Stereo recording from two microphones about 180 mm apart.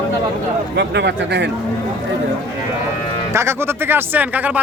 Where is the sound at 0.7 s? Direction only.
70° right (ahead or behind).